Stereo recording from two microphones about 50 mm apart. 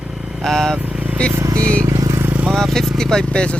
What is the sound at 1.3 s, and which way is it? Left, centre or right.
Vehicle, right.